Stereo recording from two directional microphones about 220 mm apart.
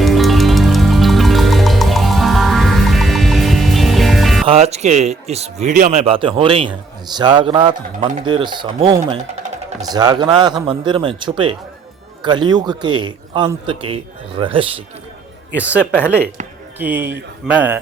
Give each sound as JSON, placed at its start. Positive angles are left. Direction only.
{"t": 0.0, "sound": "music", "side_deg": 0}
{"t": 4.4, "sound": "speech", "side_deg": -30}
{"t": 15.5, "sound": "speech", "side_deg": -5}
{"t": 15.9, "sound": "speech", "side_deg": 10}
{"t": 16.7, "sound": "speech", "side_deg": -10}